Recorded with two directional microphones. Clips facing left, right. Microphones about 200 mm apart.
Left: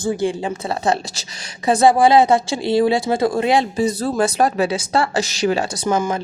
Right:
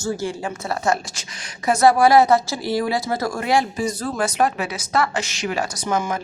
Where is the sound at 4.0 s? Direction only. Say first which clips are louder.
Left 1 dB; 35° left (ahead or behind).